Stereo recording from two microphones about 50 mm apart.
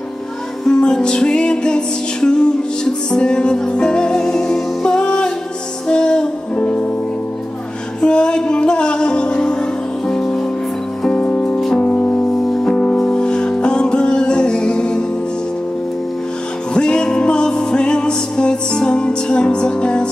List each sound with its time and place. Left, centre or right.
0.7 s music: centre
8.0 s music: centre
11.1 s music: left
16.7 s music: centre